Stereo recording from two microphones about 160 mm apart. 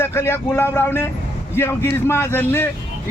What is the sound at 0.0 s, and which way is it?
A man's voice, 15° left (ahead or behind).